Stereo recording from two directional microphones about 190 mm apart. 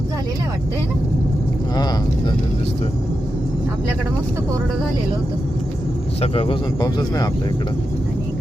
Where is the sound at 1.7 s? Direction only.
20° left (ahead or behind).